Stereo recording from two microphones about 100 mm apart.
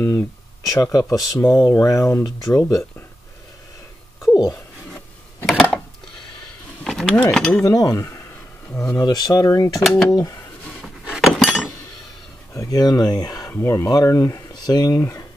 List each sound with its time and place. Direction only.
0.0 s speech: 25° left (ahead or behind)
0.7 s speech: 35° left (ahead or behind)
4.2 s a sound: 30° left (ahead or behind)
5.5 s a sound: 5° left (ahead or behind)
6.8 s mechanisms: 5° left (ahead or behind)
7.2 s speech: 5° left (ahead or behind)
7.6 s speech: 35° left (ahead or behind)
8.9 s speech: 40° left (ahead or behind)
10.6 s a sound: centre (ahead or behind)
12.5 s speech: 35° left (ahead or behind)
13.5 s speech: 25° left (ahead or behind)